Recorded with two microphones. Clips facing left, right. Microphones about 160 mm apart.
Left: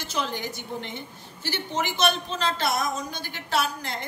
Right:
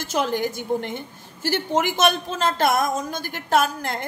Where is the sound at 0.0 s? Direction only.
50° right (ahead or behind).